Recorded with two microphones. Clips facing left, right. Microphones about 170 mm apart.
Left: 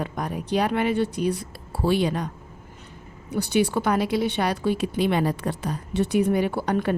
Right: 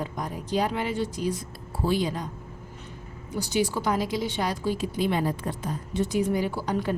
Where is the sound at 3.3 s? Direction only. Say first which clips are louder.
Left 4 dB; 60° left (ahead or behind).